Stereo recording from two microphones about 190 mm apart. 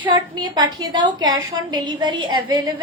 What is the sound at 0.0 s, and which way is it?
A woman's voice, 20° right (ahead or behind).